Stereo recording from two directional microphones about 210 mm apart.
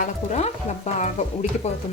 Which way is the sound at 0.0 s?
35° left (ahead or behind).